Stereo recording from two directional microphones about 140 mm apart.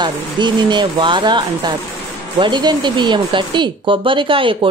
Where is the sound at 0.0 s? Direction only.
35° right (ahead or behind).